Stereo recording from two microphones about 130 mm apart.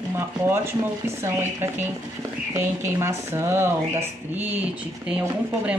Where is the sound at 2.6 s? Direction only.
20° right (ahead or behind).